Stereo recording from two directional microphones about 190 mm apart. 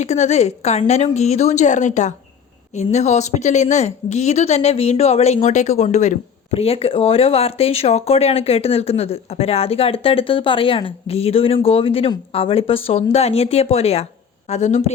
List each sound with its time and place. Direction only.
0.0 s a woman's voice: 35° left (ahead or behind)